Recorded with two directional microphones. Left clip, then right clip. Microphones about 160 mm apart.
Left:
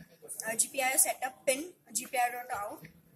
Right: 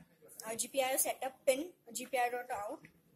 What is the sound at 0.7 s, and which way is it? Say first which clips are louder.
A woman's voice: left 2 dB; 40° right (ahead or behind).